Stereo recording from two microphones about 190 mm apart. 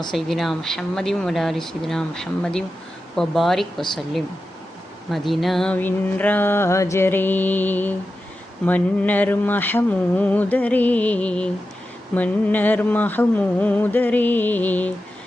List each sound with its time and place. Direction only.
0.1 s speech: centre (ahead or behind)
5.1 s mantra: centre (ahead or behind)